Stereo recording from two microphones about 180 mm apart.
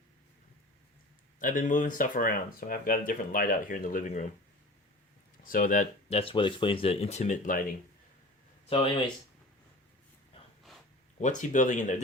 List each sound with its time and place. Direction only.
1.4 s speech: 50° left (ahead or behind)
5.4 s speech: 50° left (ahead or behind)
6.1 s speech: 30° left (ahead or behind); by 7.6 s 45° left (ahead or behind)
8.7 s speech: 30° left (ahead or behind)
11.2 s speech: 45° left (ahead or behind)